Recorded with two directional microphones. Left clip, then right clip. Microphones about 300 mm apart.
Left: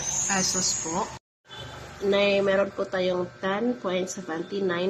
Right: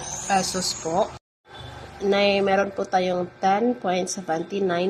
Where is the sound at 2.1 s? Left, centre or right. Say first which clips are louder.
Right 2 dB; centre.